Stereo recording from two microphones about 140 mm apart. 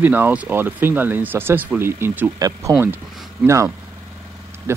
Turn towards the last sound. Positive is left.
turn(degrees=-20)  # may be behind; listen again after turning